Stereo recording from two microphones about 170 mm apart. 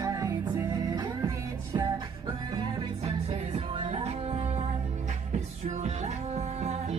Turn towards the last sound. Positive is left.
turn(degrees=-40)  # may be behind; listen again after turning